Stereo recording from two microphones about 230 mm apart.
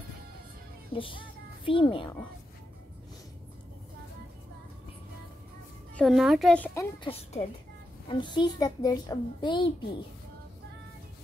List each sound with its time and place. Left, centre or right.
0.9 s a child's voice: left
5.9 s speech: centre
7.4 s a child's voice: left